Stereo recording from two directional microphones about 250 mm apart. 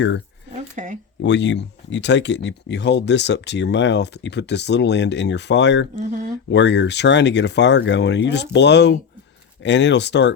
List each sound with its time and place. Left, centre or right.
0.8 s a sound: right
1.2 s speech: left
6.0 s speech: right
6.5 s speech: left